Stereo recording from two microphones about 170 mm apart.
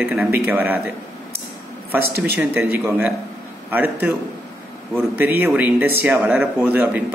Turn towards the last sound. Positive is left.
turn(degrees=-10)  # may be behind; listen again after turning